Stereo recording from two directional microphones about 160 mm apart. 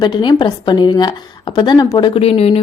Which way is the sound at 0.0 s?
30° left (ahead or behind).